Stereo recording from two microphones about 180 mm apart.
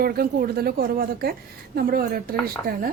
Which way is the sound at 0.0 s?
55° right (ahead or behind).